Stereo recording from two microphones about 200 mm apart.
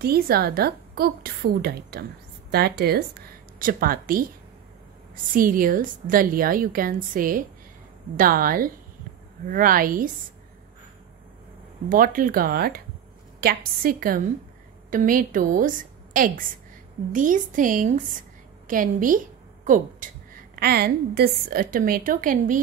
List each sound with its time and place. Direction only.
0.0 s a woman's voice: 50° right (ahead or behind)
11.9 s a woman's voice: 45° right (ahead or behind)
20.5 s a woman's voice: 50° right (ahead or behind)